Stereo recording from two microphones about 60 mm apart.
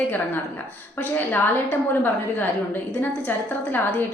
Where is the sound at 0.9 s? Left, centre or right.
Left.